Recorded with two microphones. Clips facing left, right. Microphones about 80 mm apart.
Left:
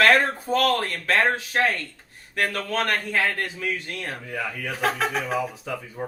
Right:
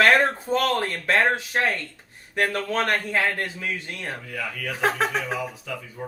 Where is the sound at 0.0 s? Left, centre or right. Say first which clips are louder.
Even; right.